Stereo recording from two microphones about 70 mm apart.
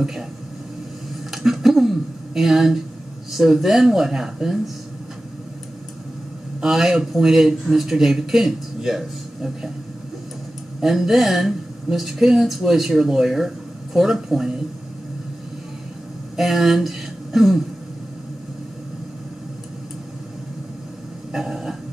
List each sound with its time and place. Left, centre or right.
0.0 s speech: centre
1.3 s a sound: centre
3.3 s speech: centre
6.6 s speech: centre
10.8 s speech: centre
16.3 s speech: centre
21.3 s a sound: centre